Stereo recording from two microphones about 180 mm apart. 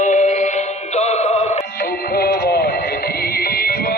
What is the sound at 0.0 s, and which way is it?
Music, 40° left (ahead or behind).